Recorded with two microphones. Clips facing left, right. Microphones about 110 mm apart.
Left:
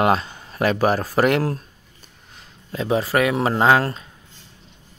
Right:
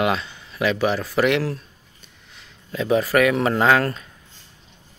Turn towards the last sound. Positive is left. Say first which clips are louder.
# left 1 dB
turn(degrees=25)  # may be behind; listen again after turning